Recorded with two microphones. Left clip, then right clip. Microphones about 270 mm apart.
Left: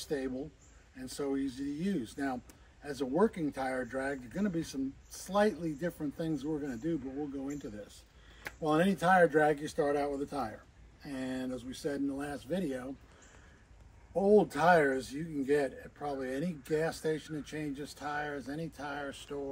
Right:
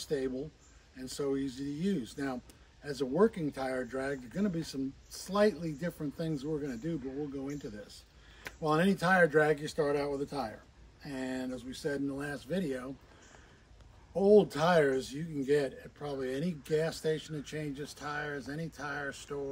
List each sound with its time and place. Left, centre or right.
0.0 s speech: centre
14.2 s speech: centre